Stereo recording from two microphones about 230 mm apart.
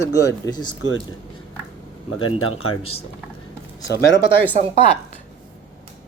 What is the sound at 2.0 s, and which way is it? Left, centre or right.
Speech, left.